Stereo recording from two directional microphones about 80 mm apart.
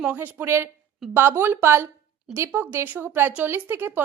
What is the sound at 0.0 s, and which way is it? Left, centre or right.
Speech, right.